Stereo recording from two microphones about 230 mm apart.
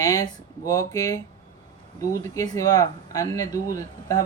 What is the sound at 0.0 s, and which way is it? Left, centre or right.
Speech, centre.